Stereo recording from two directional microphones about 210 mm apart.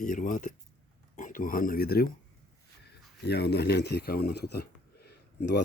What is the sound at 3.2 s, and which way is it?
Speech, 50° left (ahead or behind).